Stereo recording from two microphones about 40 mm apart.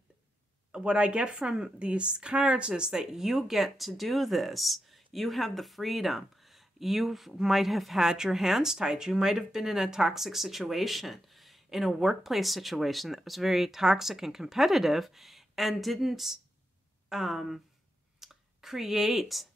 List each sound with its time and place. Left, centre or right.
0.7 s speech: right
2.7 s speech: centre
18.2 s clicking: centre